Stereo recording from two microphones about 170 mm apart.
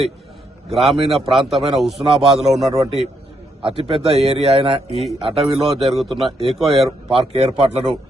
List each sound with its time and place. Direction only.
0.7 s a man's voice: centre (ahead or behind)
3.6 s speech: 30° right (ahead or behind)
5.8 s a man's voice: centre (ahead or behind)
7.2 s speech: 35° right (ahead or behind)